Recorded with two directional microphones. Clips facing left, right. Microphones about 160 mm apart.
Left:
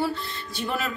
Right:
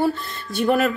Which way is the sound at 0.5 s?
55° right (ahead or behind).